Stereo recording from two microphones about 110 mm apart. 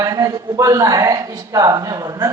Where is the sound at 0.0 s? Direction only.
30° right (ahead or behind).